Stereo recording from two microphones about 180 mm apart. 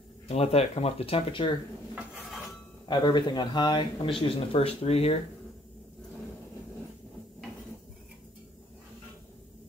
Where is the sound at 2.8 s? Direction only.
25° left (ahead or behind).